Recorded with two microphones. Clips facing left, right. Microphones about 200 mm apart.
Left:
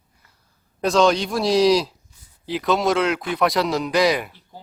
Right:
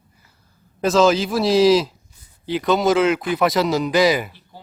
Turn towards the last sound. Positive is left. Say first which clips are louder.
# right 2 dB
turn(degrees=0)  # may be behind; listen again after turning